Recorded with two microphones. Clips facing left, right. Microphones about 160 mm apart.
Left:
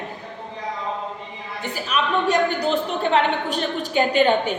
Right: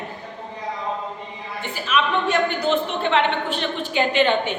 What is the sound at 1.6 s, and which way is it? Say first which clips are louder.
A woman's voice: right 1 dB; 40° left (ahead or behind).